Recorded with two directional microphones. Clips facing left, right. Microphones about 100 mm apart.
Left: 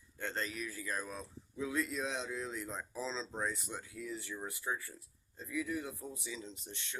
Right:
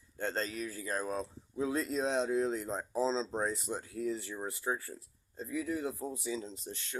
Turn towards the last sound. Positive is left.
turn(degrees=-35)  # may be behind; listen again after turning